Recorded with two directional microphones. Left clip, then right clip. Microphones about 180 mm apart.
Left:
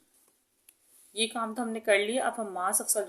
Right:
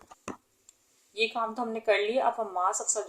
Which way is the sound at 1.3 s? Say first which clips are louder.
Right 2 dB; 55° left (ahead or behind).